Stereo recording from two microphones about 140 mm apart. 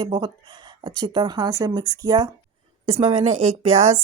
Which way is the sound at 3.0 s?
45° right (ahead or behind).